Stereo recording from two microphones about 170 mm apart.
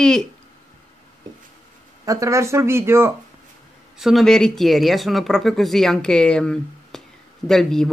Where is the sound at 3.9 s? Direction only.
Centre (ahead or behind).